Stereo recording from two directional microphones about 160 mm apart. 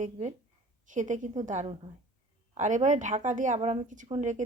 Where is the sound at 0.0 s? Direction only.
45° right (ahead or behind).